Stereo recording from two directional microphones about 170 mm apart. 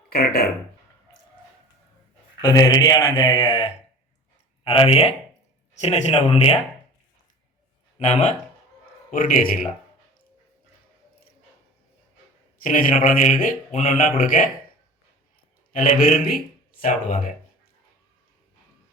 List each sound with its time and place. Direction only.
0.1 s speech: 60° left (ahead or behind)
2.4 s speech: 20° left (ahead or behind)
7.9 s a man's voice: 40° left (ahead or behind)
12.6 s a man's voice: 55° left (ahead or behind)
12.9 s a man's voice: 40° left (ahead or behind)
15.7 s a man's voice: 50° left (ahead or behind)